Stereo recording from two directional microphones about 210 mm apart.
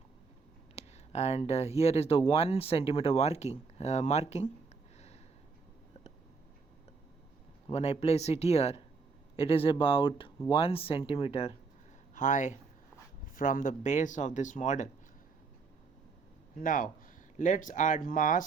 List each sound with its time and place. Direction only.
0.8 s speech: 30° left (ahead or behind)
7.7 s speech: 30° left (ahead or behind)
16.6 s speech: 40° left (ahead or behind)